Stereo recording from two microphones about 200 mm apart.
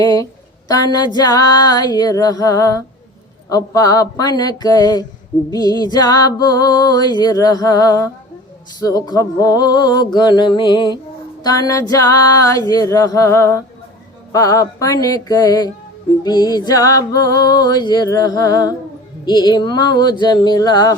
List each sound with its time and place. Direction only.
0.0 s female singing: 20° left (ahead or behind)
0.7 s music: 20° left (ahead or behind)
11.4 s female singing: 20° left (ahead or behind)
16.2 s music: 20° left (ahead or behind)